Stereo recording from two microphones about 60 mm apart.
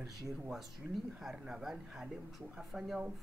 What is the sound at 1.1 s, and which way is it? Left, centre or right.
Speech, centre.